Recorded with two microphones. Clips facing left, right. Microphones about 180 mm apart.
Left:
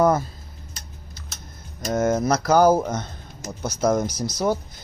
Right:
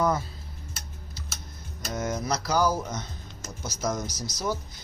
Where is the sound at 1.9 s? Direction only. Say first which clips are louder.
Left 9 dB; 50° left (ahead or behind).